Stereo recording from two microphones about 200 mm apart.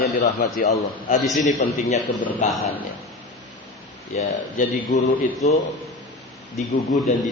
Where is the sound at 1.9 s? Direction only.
35° left (ahead or behind).